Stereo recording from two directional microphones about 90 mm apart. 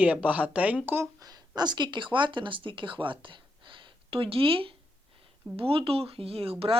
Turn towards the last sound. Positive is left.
turn(degrees=-90)